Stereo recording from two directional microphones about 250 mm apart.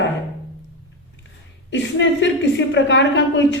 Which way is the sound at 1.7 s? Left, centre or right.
Left.